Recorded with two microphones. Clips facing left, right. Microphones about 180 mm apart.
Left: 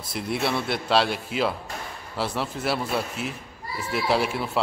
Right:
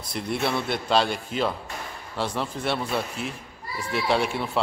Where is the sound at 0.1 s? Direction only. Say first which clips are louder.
Even; 5° left (ahead or behind).